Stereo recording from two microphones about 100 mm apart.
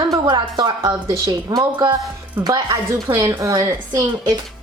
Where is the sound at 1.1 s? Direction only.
30° right (ahead or behind).